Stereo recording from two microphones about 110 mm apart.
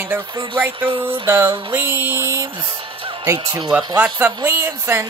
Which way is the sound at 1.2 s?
20° right (ahead or behind).